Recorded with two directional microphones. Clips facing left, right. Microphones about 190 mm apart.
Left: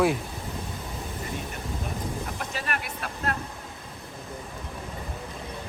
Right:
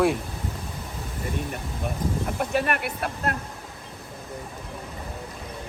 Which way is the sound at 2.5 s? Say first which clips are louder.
Right 10 dB; 60° right (ahead or behind).